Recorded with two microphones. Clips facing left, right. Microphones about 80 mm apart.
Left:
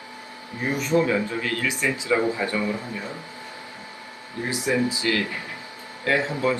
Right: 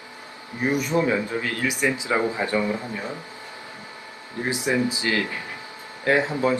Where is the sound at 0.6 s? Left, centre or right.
Right.